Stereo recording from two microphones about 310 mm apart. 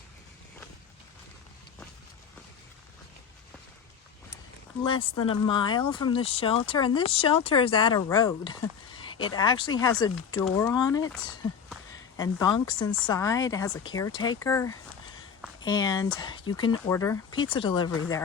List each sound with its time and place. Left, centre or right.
4.8 s speech: centre